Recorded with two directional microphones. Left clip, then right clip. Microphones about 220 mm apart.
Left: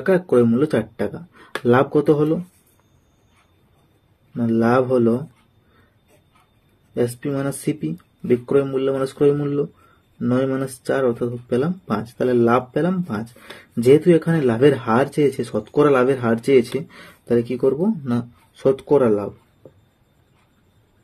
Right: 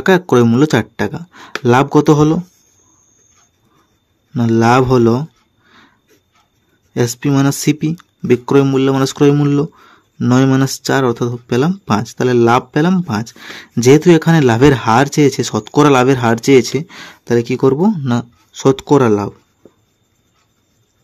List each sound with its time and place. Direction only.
0.0 s speech: 45° right (ahead or behind)
4.3 s speech: 45° right (ahead or behind)
6.9 s speech: 45° right (ahead or behind)